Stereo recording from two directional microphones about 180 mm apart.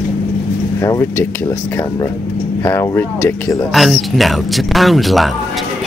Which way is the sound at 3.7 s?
Centre (ahead or behind).